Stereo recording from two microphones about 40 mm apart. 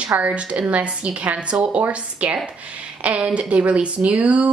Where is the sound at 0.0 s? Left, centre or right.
Right.